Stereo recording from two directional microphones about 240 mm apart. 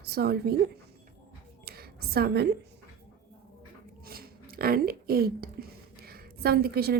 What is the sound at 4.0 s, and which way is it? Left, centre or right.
A woman's voice, right.